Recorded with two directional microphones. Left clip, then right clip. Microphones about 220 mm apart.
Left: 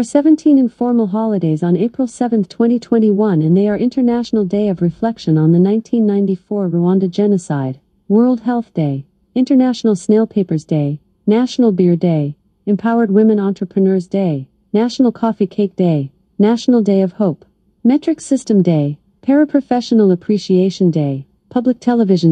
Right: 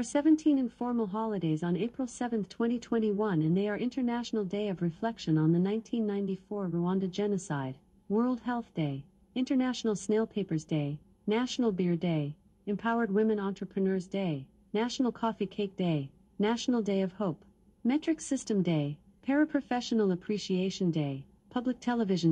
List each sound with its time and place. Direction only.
0.0 s speech: 50° left (ahead or behind)
6.5 s speech: 40° left (ahead or behind)